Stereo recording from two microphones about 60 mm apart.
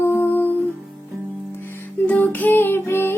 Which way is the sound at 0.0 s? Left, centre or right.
Left.